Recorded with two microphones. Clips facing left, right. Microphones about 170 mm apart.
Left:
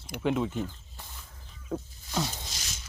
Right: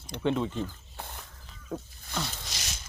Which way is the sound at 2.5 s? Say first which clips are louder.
Right 3 dB; 80° right.